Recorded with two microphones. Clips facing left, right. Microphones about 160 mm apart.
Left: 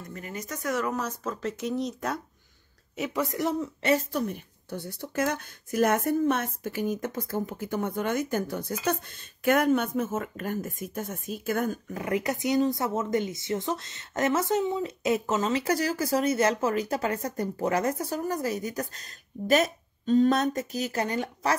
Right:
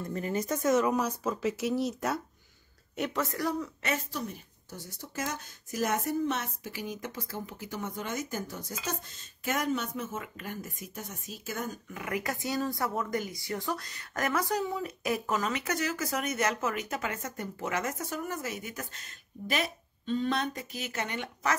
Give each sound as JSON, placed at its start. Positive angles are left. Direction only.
{"t": 0.1, "sound": "speech", "side_deg": -30}
{"t": 3.0, "sound": "a woman's voice", "side_deg": 10}
{"t": 4.1, "sound": "a woman's voice", "side_deg": 60}
{"t": 11.9, "sound": "speech", "side_deg": 30}